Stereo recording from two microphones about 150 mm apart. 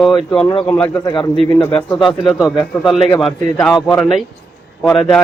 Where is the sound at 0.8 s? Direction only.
20° left (ahead or behind).